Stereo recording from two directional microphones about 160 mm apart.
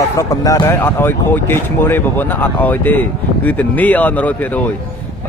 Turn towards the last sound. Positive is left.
turn(degrees=10)  # may be behind; listen again after turning